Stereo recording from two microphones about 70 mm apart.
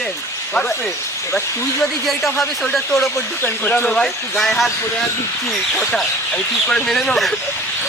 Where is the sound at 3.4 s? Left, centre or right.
Left.